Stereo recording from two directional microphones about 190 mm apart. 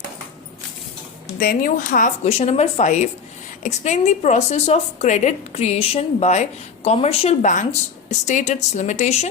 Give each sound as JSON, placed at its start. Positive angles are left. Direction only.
{"t": 1.4, "sound": "a woman's voice", "side_deg": 50}